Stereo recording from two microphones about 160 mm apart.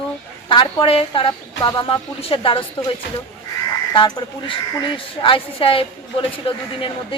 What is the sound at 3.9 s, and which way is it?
Speech, 30° left (ahead or behind).